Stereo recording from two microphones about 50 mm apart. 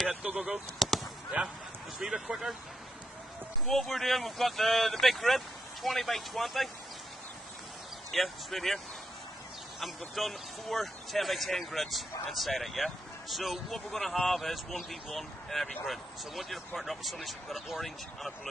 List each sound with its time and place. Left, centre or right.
0.1 s speech: right
0.7 s speech: centre
1.3 s speech: right
2.0 s speech: centre
3.6 s speech: centre
8.1 s speech: centre